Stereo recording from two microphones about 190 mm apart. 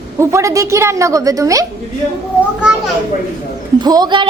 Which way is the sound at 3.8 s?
20° right (ahead or behind).